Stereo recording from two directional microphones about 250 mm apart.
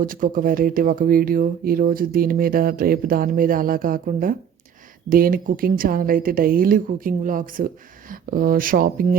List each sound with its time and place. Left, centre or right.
0.0 s speech: right